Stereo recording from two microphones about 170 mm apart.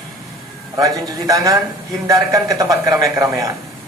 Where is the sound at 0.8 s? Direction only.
20° right (ahead or behind).